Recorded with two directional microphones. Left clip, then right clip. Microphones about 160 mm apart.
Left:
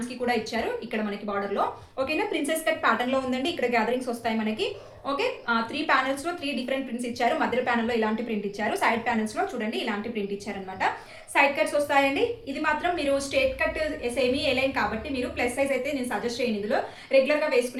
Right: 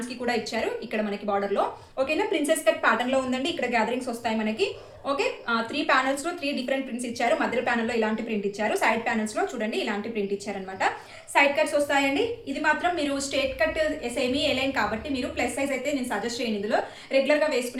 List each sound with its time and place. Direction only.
1.3 s a woman's voice: 30° right (ahead or behind)
11.3 s a woman's voice: 25° right (ahead or behind)